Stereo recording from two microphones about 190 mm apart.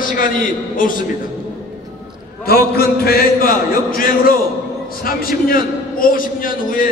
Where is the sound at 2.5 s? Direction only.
55° left (ahead or behind).